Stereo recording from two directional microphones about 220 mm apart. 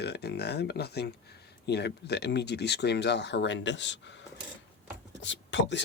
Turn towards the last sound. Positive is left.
turn(degrees=55)  # may be behind; listen again after turning